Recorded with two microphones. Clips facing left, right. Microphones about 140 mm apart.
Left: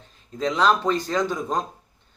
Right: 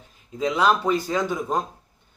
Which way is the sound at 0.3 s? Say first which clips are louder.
Even; 10° right (ahead or behind).